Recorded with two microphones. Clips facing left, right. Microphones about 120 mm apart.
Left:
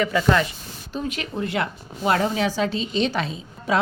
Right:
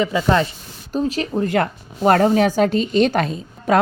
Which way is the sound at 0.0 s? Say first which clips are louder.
Right 2 dB; 25° right (ahead or behind).